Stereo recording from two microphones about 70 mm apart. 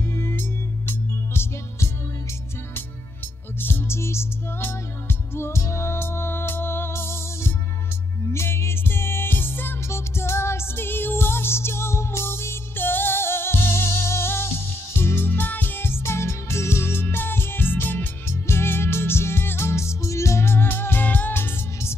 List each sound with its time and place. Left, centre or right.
0.1 s music: left
3.6 s music: left